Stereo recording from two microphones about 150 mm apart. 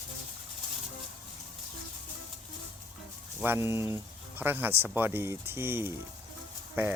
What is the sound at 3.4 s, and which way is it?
Speech, 15° right (ahead or behind).